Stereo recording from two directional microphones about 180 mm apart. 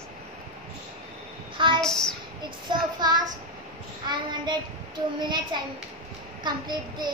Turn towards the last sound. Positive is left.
turn(degrees=-25)  # may be behind; listen again after turning